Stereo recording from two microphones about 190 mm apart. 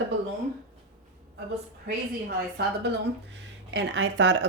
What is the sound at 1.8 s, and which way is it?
A woman's voice, 55° right (ahead or behind).